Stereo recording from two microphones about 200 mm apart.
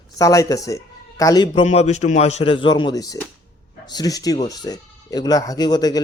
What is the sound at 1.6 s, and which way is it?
Speech, 35° left (ahead or behind).